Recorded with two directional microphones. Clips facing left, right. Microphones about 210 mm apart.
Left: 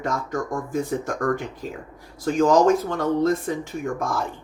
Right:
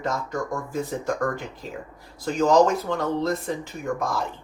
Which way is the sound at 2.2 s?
50° left (ahead or behind).